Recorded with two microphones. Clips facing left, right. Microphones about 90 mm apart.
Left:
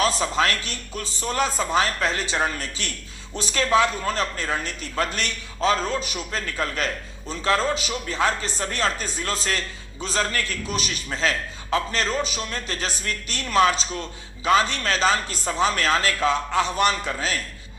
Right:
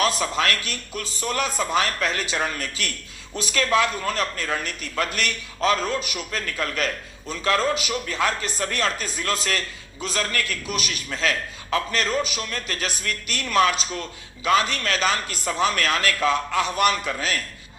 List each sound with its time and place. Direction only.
0.0 s a man's voice: 30° left (ahead or behind)